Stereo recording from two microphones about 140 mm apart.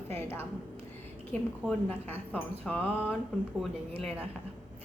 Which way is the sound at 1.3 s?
10° left (ahead or behind).